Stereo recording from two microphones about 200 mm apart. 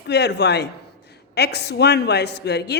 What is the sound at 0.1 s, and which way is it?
A woman's voice, 55° left (ahead or behind).